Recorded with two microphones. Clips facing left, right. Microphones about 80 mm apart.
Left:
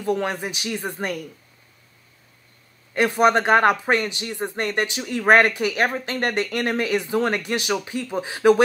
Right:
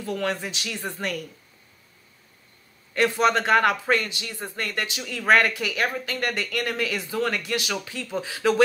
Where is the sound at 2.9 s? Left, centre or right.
Left.